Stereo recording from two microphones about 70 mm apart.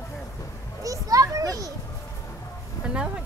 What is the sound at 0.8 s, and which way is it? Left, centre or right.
Speech, right.